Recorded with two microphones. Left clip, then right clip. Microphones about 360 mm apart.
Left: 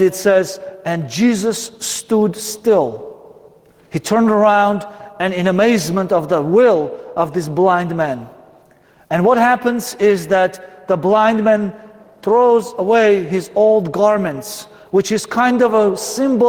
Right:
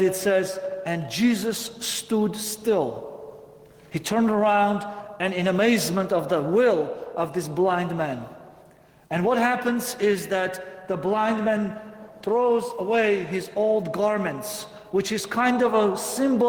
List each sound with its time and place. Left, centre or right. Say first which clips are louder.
0.0 s a man's voice: left 8 dB; left
3.9 s a man's voice: left 9 dB; left